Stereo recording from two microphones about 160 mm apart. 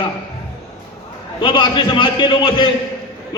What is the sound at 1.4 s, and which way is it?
A man's voice, 25° left (ahead or behind).